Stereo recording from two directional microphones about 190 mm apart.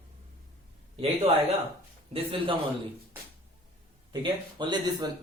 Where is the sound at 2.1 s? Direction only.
30° right (ahead or behind).